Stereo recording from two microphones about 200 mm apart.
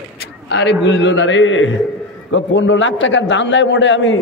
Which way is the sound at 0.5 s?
60° left (ahead or behind).